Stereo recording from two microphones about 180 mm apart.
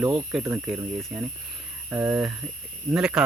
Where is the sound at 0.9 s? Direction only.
5° right (ahead or behind).